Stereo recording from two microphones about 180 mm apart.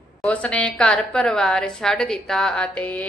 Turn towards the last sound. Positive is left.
turn(degrees=10)  # may be behind; listen again after turning